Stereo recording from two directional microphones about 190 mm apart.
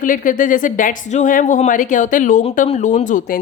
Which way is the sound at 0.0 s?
45° left (ahead or behind).